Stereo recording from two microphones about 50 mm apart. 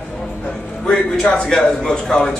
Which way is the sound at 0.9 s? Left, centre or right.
Centre.